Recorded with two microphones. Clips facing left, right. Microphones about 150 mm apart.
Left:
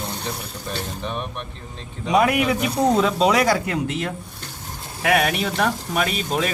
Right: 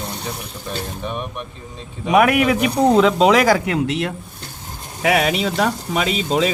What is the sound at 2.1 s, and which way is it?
A man's voice, 80° right.